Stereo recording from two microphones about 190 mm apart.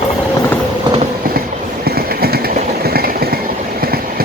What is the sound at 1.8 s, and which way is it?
Train, 55° right (ahead or behind).